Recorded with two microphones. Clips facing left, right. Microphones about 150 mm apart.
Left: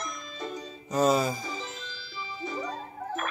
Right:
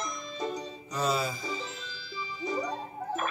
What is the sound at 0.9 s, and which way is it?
Music, 45° left (ahead or behind).